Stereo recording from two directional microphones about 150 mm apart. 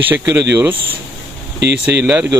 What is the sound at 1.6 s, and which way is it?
Speech, 90° right.